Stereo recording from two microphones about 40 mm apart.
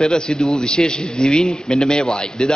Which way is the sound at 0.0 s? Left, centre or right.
Centre.